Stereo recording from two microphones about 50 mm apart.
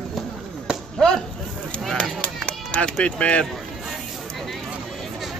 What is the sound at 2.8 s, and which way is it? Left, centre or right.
Speech, left.